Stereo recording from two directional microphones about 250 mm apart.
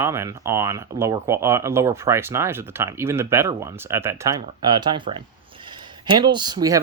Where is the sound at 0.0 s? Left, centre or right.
Centre.